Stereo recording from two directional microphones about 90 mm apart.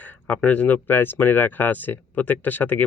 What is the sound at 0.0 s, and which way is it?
Speech, 15° left (ahead or behind).